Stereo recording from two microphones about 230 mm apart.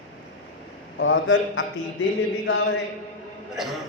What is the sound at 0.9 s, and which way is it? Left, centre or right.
Speech, left.